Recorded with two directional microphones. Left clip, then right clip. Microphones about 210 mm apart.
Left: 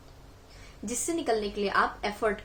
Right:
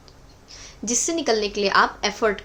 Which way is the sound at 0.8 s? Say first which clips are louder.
Right 7 dB; 35° right (ahead or behind).